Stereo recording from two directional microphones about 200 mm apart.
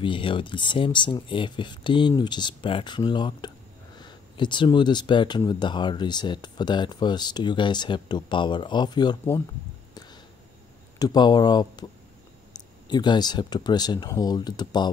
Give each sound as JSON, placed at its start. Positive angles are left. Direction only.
{"t": 0.0, "sound": "speech", "side_deg": 25}
{"t": 11.0, "sound": "speech", "side_deg": 20}